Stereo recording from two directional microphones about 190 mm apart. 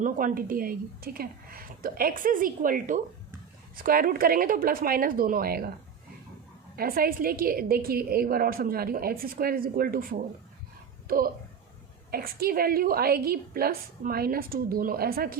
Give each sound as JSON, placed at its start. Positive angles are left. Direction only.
{"t": 0.0, "sound": "a woman's voice", "side_deg": -45}
{"t": 6.7, "sound": "a woman's voice", "side_deg": -50}
{"t": 12.1, "sound": "a woman's voice", "side_deg": -50}